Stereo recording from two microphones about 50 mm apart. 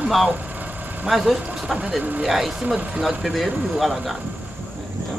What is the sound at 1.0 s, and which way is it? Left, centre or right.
Speech, centre.